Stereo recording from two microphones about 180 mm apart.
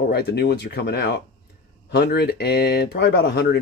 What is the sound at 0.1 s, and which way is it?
Speech, 65° left (ahead or behind).